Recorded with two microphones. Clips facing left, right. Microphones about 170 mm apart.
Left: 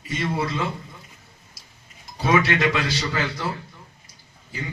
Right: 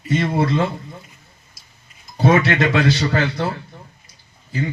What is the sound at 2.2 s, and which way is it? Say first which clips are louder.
Speech: right 5 dB; 55° right (ahead or behind).